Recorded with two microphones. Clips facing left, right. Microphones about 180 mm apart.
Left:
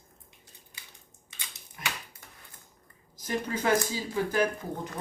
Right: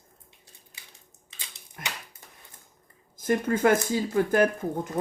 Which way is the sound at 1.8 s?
55° right (ahead or behind).